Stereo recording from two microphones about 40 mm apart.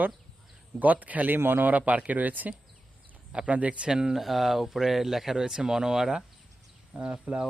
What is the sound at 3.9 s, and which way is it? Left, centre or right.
Speech, centre.